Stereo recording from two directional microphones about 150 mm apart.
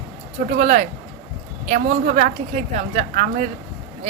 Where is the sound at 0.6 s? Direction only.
55° right (ahead or behind).